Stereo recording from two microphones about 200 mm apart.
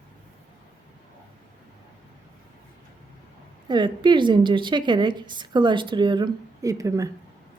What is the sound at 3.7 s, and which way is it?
A woman's voice, 25° right (ahead or behind).